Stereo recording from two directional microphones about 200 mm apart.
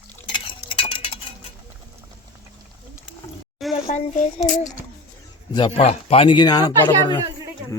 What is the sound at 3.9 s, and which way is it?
Speech, 35° left (ahead or behind).